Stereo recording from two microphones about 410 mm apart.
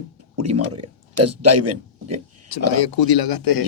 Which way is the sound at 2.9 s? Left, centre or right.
Left.